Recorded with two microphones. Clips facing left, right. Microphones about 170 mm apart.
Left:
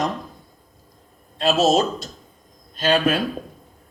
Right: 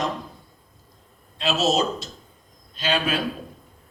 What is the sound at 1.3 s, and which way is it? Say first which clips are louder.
A man's voice: left 4 dB; 50° left (ahead or behind).